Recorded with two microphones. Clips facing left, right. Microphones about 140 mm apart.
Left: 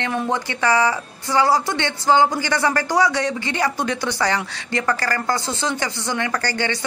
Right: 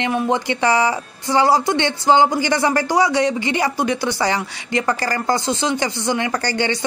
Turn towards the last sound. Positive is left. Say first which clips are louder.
# right 3 dB
turn(degrees=-20)  # may be behind; listen again after turning